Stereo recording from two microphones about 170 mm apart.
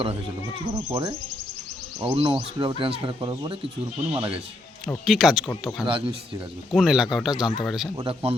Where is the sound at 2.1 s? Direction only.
35° right (ahead or behind).